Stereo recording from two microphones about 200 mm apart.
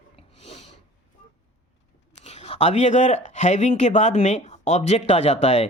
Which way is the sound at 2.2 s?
30° left (ahead or behind).